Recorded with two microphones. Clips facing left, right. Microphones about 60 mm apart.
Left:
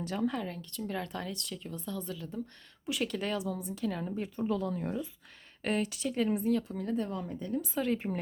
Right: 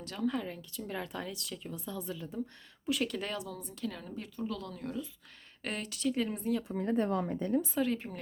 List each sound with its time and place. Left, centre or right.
0.0 s a woman's voice: centre
0.3 s speech: centre
2.8 s a woman's voice: centre
4.0 s speech: left
5.6 s speech: centre
6.7 s speech: right
6.9 s a woman's voice: right
7.7 s speech: centre
7.9 s speech: left